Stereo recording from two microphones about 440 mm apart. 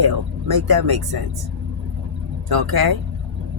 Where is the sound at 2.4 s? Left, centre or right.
Right.